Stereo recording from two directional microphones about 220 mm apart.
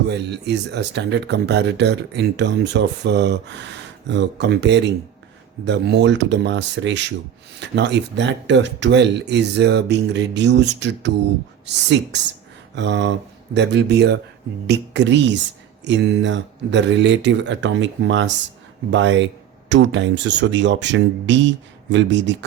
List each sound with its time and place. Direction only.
0.1 s speech: 50° right (ahead or behind)